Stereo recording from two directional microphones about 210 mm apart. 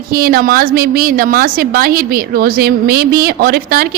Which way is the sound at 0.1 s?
45° right (ahead or behind).